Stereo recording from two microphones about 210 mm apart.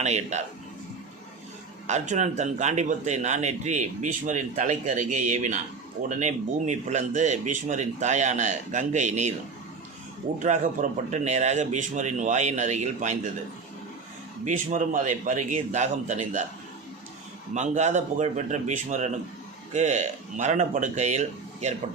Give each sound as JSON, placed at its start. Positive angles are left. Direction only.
{"t": 0.0, "sound": "a man's voice", "side_deg": -35}
{"t": 1.9, "sound": "a man's voice", "side_deg": -35}
{"t": 10.4, "sound": "a man's voice", "side_deg": -35}
{"t": 14.4, "sound": "a man's voice", "side_deg": -35}
{"t": 17.5, "sound": "a man's voice", "side_deg": -35}